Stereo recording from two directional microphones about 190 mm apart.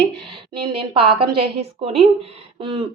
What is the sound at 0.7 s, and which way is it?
A woman's voice, 30° right (ahead or behind).